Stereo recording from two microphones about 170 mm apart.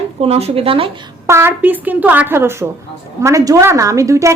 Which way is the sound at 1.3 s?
15° right (ahead or behind).